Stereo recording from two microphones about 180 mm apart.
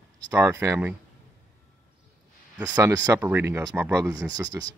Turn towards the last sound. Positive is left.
turn(degrees=-20)  # may be behind; listen again after turning